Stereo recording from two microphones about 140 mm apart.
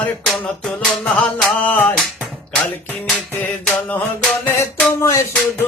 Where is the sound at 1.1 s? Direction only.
10° left (ahead or behind).